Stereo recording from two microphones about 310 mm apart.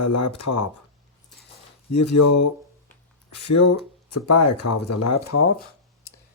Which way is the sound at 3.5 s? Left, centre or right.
Left.